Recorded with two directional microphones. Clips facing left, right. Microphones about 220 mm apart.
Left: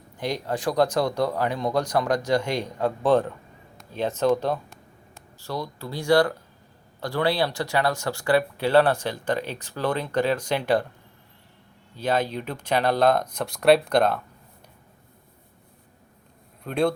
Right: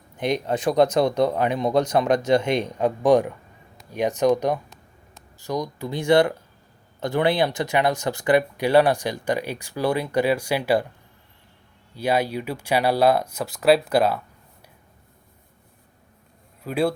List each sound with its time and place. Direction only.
0.2 s speech: 20° right (ahead or behind)
11.9 s speech: 10° right (ahead or behind)
16.6 s speech: 5° right (ahead or behind)